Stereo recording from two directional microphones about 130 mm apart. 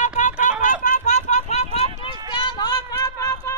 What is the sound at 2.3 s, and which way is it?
Run, 35° left (ahead or behind).